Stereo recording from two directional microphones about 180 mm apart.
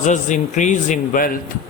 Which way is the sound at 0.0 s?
40° left (ahead or behind).